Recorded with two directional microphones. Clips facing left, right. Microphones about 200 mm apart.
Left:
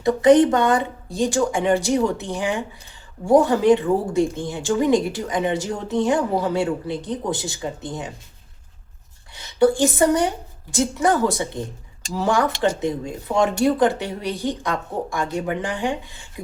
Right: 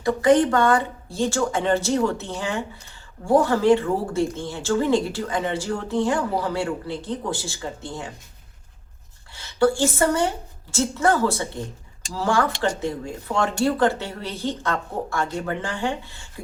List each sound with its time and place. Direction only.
0.0 s speech: 20° left (ahead or behind)
9.3 s a woman's voice: 20° left (ahead or behind)